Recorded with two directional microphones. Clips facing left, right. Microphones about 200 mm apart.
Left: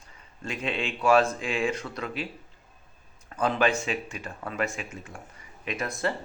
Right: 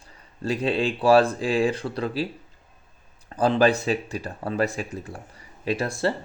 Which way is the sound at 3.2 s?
35° right (ahead or behind).